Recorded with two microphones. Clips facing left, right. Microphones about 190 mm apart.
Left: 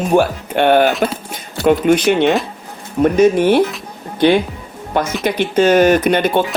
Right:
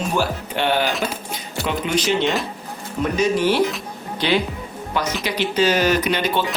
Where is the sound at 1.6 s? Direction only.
50° left (ahead or behind).